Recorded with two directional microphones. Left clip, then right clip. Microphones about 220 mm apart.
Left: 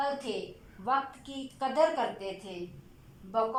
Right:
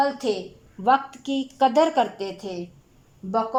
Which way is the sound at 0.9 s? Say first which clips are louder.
Right 10 dB; 45° right (ahead or behind).